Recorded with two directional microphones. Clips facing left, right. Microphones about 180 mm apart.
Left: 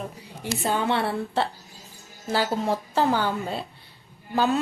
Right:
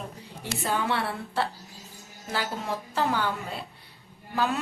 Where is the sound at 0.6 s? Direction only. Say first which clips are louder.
Left 3 dB; 25° left (ahead or behind).